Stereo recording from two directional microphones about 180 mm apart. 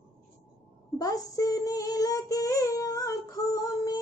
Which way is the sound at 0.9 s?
20° left (ahead or behind).